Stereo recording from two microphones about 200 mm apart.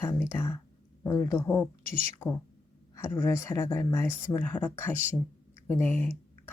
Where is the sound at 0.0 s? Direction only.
10° left (ahead or behind).